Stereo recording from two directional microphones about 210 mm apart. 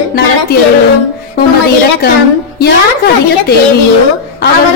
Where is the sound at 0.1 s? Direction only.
50° left (ahead or behind).